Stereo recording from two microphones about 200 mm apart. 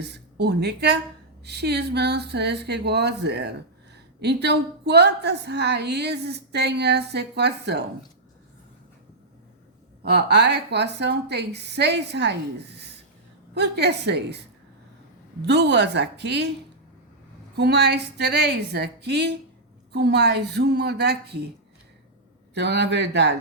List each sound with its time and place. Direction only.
0.0 s a woman's voice: 55° right (ahead or behind)
10.0 s a woman's voice: 55° right (ahead or behind)
15.4 s a woman's voice: 60° right (ahead or behind)
17.6 s a woman's voice: 55° right (ahead or behind)
22.5 s a woman's voice: 60° right (ahead or behind)